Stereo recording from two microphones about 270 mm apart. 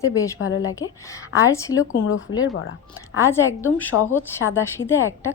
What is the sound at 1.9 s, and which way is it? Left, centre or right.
Speech, left.